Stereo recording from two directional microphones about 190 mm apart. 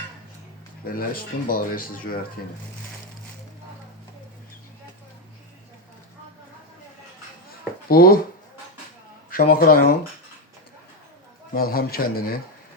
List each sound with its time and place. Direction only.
0.9 s speech: 50° left (ahead or behind)
7.9 s speech: 50° left (ahead or behind)
9.3 s speech: 50° left (ahead or behind)
11.5 s speech: 50° left (ahead or behind)